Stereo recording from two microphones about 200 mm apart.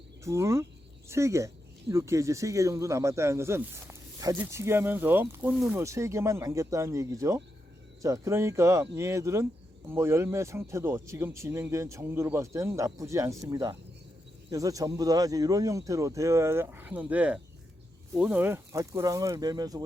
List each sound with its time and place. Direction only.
0.3 s speech: 15° right (ahead or behind)